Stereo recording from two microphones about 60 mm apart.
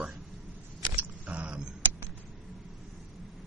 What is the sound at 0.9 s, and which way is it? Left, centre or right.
Single-lens reflex camera, right.